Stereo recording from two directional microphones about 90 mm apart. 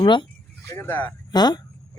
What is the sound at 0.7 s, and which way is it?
Speech, 30° left (ahead or behind).